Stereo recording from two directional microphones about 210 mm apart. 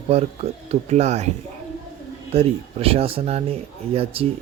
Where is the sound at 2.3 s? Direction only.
30° right (ahead or behind).